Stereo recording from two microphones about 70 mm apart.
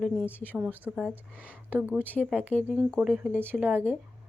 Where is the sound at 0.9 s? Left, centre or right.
Centre.